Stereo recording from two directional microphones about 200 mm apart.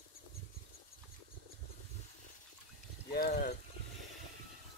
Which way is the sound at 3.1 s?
50° left (ahead or behind).